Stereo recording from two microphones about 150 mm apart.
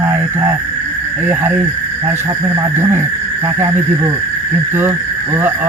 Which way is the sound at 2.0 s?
15° right (ahead or behind).